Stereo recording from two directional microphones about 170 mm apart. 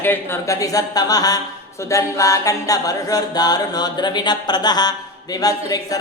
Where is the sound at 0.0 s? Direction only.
15° left (ahead or behind).